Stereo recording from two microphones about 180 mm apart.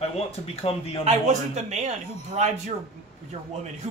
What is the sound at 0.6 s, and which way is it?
Speech, 30° left (ahead or behind).